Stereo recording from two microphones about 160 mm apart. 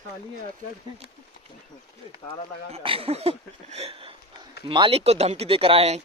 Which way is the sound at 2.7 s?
35° right (ahead or behind).